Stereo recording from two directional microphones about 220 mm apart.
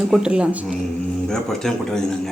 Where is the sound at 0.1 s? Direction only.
5° right (ahead or behind).